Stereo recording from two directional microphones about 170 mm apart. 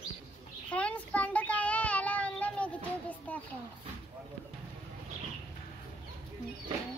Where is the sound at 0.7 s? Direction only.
10° left (ahead or behind).